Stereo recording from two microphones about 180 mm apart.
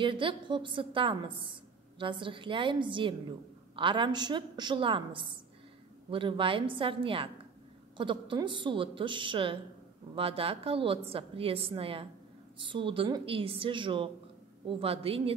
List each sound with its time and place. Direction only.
0.0 s a woman's voice: 30° right (ahead or behind)